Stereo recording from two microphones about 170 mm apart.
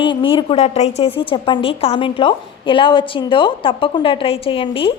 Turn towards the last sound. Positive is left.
turn(degrees=30)  # may be behind; listen again after turning